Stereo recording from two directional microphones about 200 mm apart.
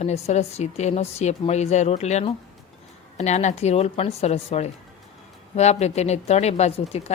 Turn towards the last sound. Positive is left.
turn(degrees=30)  # may be behind; listen again after turning